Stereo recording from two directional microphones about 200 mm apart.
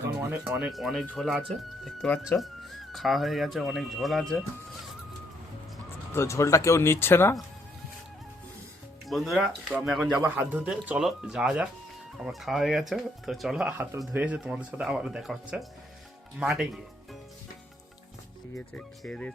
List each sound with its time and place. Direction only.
0.2 s speech: 15° right (ahead or behind)
0.7 s speech: centre (ahead or behind)
6.1 s speech: 15° left (ahead or behind)
9.0 s speech: centre (ahead or behind)
18.5 s speech: 5° left (ahead or behind)